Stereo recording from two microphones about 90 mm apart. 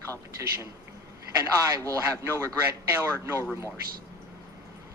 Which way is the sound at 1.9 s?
35° right (ahead or behind).